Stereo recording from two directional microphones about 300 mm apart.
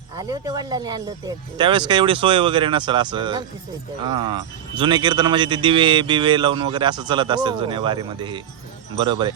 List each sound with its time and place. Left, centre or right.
0.2 s speech: centre